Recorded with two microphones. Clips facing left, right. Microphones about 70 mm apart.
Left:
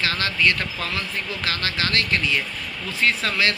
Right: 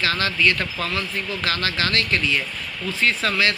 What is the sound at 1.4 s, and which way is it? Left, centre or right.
Speech, right.